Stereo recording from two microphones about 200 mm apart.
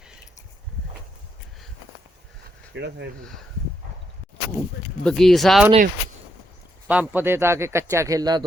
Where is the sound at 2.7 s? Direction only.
60° right (ahead or behind).